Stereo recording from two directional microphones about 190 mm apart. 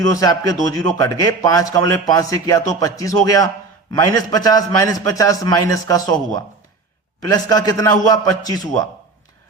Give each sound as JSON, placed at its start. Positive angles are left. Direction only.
{"t": 0.0, "sound": "a man's voice", "side_deg": 20}
{"t": 2.6, "sound": "music", "side_deg": 20}
{"t": 3.9, "sound": "a man's voice", "side_deg": 20}
{"t": 7.3, "sound": "a man's voice", "side_deg": 20}